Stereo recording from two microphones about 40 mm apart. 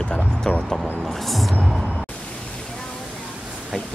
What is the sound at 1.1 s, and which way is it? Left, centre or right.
Music, centre.